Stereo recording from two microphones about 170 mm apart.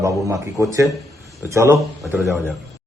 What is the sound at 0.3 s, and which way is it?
Speech, 20° right (ahead or behind).